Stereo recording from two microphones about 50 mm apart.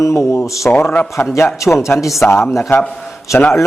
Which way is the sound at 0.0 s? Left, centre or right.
Left.